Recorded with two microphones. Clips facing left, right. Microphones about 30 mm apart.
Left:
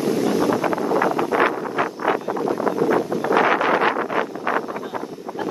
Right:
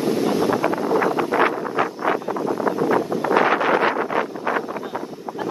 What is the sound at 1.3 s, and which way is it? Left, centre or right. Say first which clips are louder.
Wind noise: even; right.